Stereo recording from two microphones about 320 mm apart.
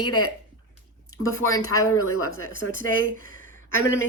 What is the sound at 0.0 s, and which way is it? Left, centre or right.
A woman's voice, left.